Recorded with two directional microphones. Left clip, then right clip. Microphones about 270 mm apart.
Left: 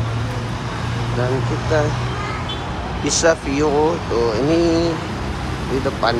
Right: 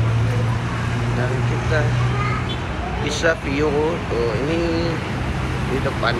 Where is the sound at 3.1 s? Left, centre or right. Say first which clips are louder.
Left 4 dB; centre.